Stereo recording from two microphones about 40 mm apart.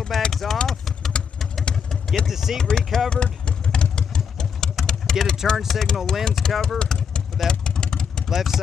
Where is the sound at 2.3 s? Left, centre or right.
Centre.